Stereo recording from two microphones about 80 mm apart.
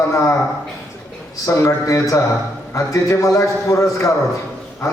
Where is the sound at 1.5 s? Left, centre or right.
Left.